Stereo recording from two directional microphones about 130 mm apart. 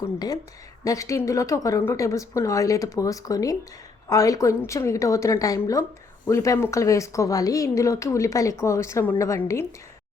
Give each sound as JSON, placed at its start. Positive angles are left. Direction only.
{"t": 0.0, "sound": "speech", "side_deg": 30}